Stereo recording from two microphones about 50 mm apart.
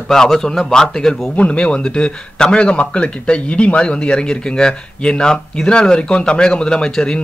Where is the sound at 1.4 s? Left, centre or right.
Left.